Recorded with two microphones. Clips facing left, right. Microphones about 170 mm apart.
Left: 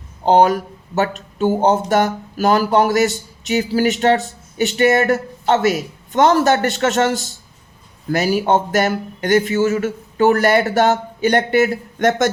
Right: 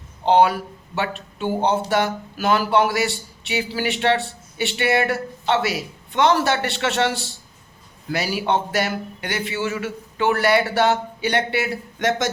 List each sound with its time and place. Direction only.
0.3 s speech: 45° left (ahead or behind)